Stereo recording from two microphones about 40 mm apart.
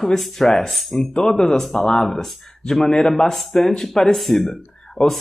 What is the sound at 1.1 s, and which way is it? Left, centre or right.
Speech, centre.